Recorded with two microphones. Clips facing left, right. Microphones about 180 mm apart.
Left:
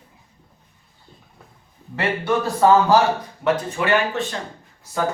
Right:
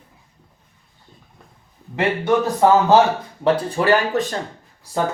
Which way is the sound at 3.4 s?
35° right (ahead or behind).